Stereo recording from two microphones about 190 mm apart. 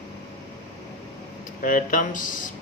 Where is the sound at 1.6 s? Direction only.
45° left (ahead or behind).